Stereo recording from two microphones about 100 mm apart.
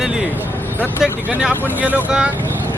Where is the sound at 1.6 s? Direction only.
20° right (ahead or behind).